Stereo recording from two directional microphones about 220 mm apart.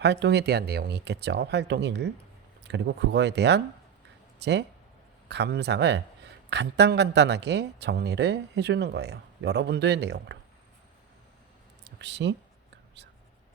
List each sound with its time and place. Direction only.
0.0 s speech: 50° right (ahead or behind)
11.9 s speech: 50° right (ahead or behind)